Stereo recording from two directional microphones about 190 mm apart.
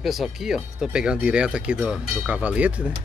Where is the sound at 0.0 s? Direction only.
Centre (ahead or behind).